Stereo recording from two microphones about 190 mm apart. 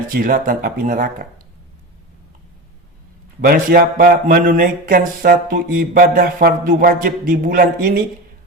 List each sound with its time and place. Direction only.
0.1 s speech: 50° right (ahead or behind)
3.4 s speech: 50° right (ahead or behind)